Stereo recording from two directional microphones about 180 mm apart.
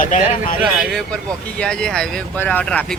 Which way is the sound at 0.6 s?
Centre (ahead or behind).